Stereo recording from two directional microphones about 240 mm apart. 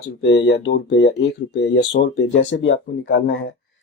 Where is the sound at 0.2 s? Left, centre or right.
Left.